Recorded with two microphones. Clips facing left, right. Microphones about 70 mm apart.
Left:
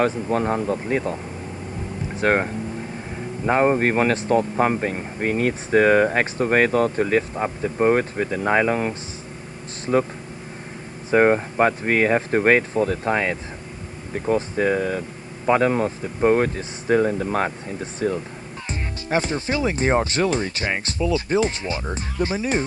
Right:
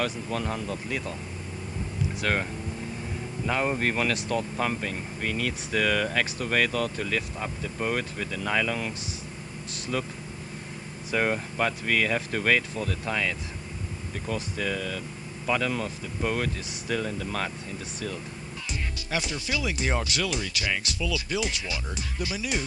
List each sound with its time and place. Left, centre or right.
0.0 s a man's voice: left
2.1 s a man's voice: left
11.1 s a man's voice: left